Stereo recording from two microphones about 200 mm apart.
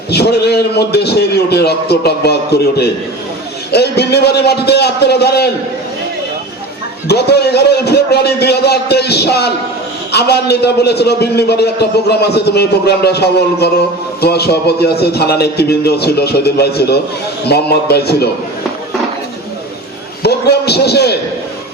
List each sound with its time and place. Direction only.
0.1 s a man's voice: 55° left (ahead or behind)
7.1 s a man's voice: 55° left (ahead or behind)
20.2 s a man's voice: 55° left (ahead or behind)